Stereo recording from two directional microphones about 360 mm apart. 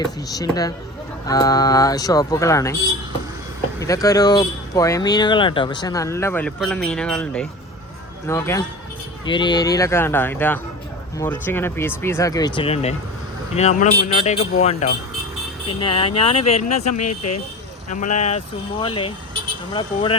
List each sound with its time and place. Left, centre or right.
0.0 s speech: centre
3.8 s speech: centre
16.9 s speech: left
17.9 s speech: centre